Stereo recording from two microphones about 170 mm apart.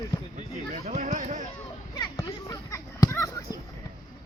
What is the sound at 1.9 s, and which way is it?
Speech, 25° left (ahead or behind).